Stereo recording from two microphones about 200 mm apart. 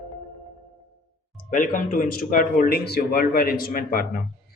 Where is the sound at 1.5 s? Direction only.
45° left (ahead or behind).